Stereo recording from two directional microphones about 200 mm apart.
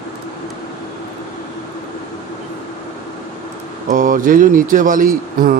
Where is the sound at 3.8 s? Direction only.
40° right (ahead or behind).